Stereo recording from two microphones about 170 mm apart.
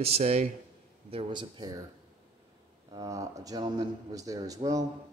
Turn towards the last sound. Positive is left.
turn(degrees=-20)  # may be behind; listen again after turning